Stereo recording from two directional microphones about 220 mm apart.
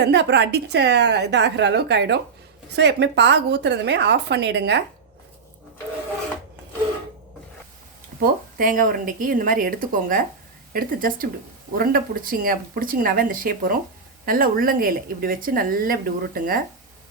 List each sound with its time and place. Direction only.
0.0 s a woman's voice: 50° right (ahead or behind)
8.2 s speech: 40° right (ahead or behind)